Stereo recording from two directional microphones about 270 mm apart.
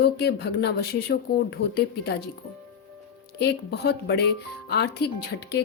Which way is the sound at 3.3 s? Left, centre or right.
Left.